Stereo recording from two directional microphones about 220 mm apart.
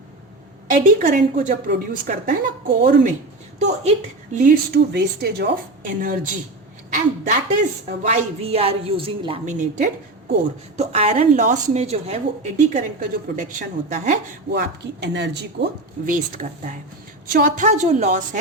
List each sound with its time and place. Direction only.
0.7 s a woman's voice: 35° right (ahead or behind)
4.4 s speech: 45° right (ahead or behind)
6.9 s a woman's voice: 35° right (ahead or behind)
14.5 s a woman's voice: 50° right (ahead or behind)